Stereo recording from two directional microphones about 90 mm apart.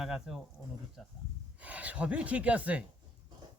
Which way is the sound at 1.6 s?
15° right (ahead or behind).